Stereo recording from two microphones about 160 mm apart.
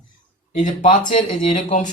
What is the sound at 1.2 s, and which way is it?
Speech, 50° left (ahead or behind).